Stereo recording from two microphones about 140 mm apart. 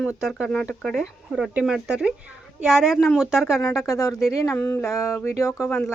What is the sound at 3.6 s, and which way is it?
Speech, 20° left (ahead or behind).